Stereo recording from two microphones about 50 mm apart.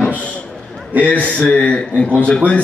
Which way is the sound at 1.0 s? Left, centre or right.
Left.